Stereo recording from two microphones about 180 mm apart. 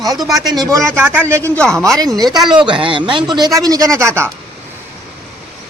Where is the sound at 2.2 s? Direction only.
20° right (ahead or behind).